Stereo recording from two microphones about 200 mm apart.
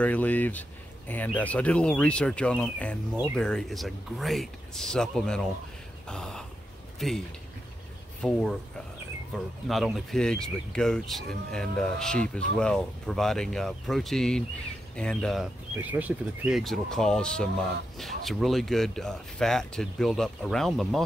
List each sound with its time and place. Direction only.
0.0 s speech: 10° left (ahead or behind)
8.2 s speech: 5° left (ahead or behind)
9.7 s speech: centre (ahead or behind)